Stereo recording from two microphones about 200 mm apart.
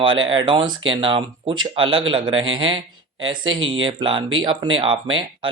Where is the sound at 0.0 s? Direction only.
25° right (ahead or behind).